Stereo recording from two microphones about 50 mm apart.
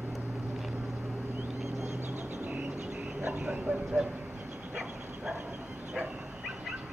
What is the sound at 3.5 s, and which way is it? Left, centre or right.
Vehicle, centre.